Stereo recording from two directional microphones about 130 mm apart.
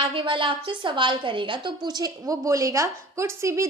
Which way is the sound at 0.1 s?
40° right (ahead or behind).